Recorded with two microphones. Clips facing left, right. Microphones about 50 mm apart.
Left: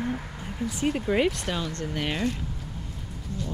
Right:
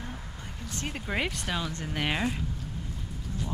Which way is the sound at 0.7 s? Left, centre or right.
Centre.